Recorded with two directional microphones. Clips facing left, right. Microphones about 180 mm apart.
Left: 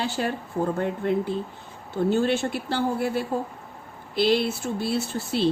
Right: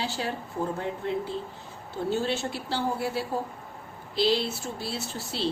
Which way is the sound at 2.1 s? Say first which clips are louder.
Left 4 dB; 55° left (ahead or behind).